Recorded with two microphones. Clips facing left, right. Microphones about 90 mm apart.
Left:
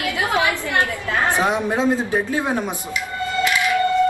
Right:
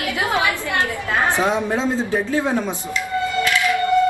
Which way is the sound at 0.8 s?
20° right (ahead or behind).